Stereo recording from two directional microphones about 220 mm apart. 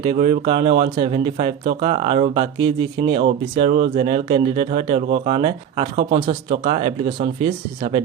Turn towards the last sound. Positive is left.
turn(degrees=-25)  # may be behind; listen again after turning